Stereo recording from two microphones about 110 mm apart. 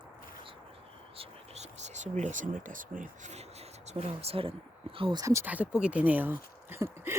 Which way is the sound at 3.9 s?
65° right (ahead or behind).